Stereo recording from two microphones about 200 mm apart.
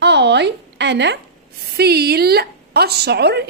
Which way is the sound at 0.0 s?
60° right (ahead or behind).